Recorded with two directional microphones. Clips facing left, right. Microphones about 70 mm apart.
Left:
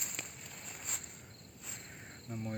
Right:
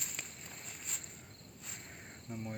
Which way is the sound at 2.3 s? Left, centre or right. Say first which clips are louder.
Left 1 dB; centre.